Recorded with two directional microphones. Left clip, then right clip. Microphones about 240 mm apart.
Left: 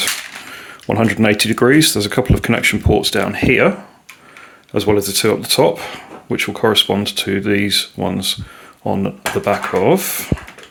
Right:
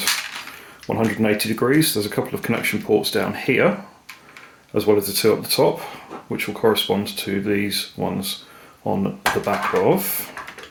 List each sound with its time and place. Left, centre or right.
0.9 s speech: left
4.7 s speech: left